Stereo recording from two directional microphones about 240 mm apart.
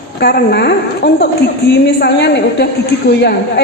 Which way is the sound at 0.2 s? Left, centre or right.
Left.